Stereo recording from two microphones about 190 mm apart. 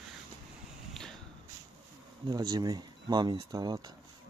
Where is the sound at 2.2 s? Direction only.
20° right (ahead or behind).